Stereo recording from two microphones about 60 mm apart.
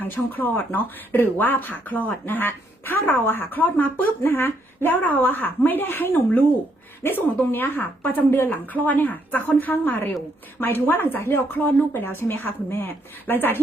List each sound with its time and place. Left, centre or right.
0.0 s speech: left